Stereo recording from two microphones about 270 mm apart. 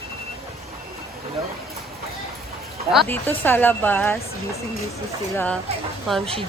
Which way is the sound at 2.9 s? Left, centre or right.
Centre.